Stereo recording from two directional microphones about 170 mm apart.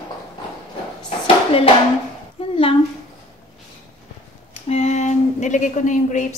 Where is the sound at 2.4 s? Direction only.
35° left (ahead or behind).